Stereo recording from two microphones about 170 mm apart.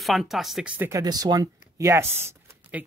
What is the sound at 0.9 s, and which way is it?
Speech, 20° right (ahead or behind).